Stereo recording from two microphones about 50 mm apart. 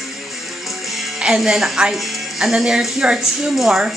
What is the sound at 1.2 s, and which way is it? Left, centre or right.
Speech, centre.